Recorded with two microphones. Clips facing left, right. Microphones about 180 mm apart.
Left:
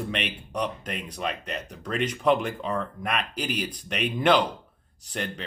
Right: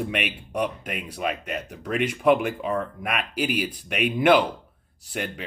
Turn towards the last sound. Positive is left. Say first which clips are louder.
# right 2 dB
turn(degrees=-10)  # may be behind; listen again after turning